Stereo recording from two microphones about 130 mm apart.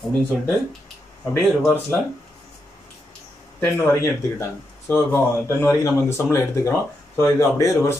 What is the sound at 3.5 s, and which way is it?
Speech, 20° left (ahead or behind).